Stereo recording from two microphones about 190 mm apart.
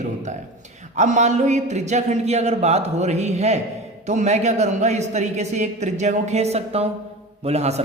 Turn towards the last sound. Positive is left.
turn(degrees=-35)  # may be behind; listen again after turning